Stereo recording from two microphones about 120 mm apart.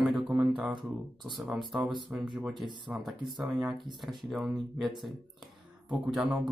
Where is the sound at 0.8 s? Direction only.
Centre (ahead or behind).